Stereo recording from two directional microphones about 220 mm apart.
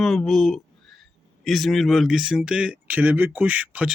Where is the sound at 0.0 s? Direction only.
Centre (ahead or behind).